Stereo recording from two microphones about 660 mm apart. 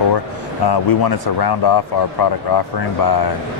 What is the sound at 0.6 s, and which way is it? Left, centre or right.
Speech, left.